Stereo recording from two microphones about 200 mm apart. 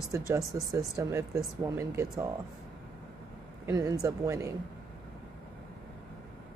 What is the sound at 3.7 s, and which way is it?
Speech, 15° right (ahead or behind).